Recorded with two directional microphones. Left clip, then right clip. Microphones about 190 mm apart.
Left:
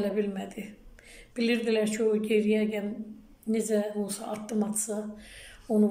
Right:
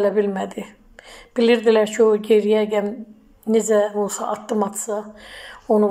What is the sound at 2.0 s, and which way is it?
Speech, 65° right (ahead or behind).